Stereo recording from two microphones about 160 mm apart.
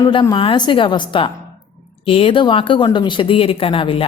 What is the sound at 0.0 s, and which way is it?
A woman's voice, 30° left (ahead or behind).